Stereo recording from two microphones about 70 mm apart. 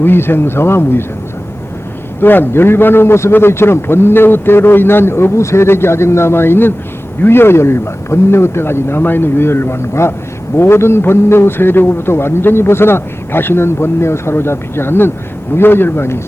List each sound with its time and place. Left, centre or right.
0.0 s a man's voice: left
2.2 s a man's voice: left